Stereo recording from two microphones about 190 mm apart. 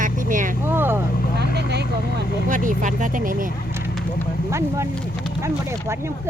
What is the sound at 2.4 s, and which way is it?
Speech, 45° right (ahead or behind).